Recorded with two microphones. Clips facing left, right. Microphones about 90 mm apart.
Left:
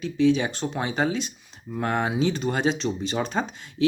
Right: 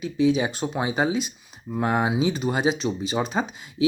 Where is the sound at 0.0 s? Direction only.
10° right (ahead or behind).